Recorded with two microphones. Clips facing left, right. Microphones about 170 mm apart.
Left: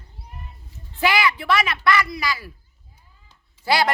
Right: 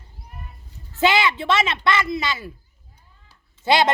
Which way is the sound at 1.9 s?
25° right (ahead or behind).